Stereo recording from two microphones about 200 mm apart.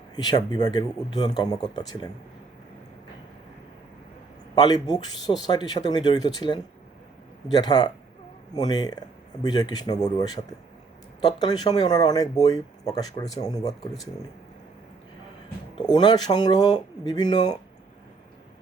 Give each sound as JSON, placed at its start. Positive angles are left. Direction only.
{"t": 0.3, "sound": "speech", "side_deg": 20}
{"t": 4.5, "sound": "speech", "side_deg": 20}
{"t": 15.7, "sound": "speech", "side_deg": 20}